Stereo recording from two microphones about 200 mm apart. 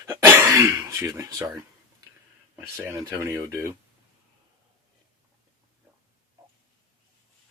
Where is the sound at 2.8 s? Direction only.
15° right (ahead or behind).